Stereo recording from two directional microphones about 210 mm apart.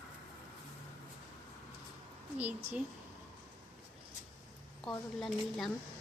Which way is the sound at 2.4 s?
5° right (ahead or behind).